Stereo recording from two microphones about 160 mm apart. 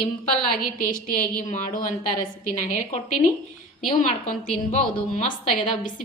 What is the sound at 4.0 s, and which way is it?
Speech, 40° left (ahead or behind).